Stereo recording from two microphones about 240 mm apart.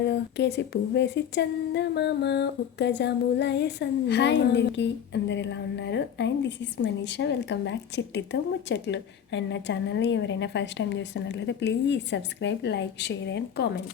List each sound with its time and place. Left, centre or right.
0.0 s humming: left